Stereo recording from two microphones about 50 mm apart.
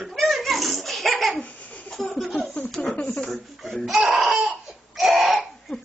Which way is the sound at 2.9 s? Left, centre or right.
Left.